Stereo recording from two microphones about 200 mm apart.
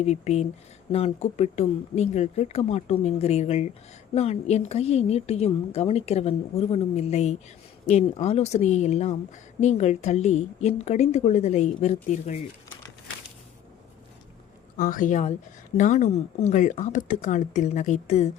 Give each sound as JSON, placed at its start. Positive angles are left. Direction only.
{"t": 0.0, "sound": "a woman's voice", "side_deg": 35}
{"t": 14.8, "sound": "a woman's voice", "side_deg": 45}